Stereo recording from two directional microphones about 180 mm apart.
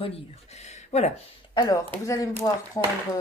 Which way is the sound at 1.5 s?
25° left (ahead or behind).